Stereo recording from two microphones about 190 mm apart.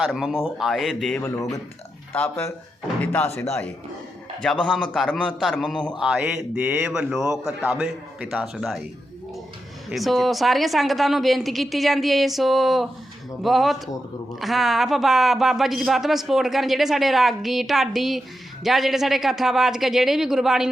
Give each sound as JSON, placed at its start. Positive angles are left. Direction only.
{"t": 0.0, "sound": "speech", "side_deg": 0}
{"t": 4.6, "sound": "speech", "side_deg": 5}
{"t": 9.9, "sound": "speech", "side_deg": 0}